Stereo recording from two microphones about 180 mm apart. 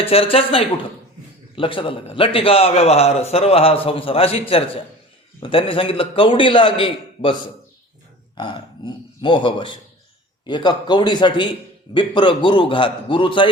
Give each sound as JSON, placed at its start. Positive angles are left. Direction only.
{"t": 0.0, "sound": "a man's voice", "side_deg": 30}
{"t": 8.4, "sound": "a man's voice", "side_deg": 25}